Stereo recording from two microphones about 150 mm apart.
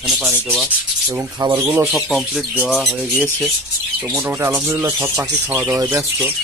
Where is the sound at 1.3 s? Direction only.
25° right (ahead or behind).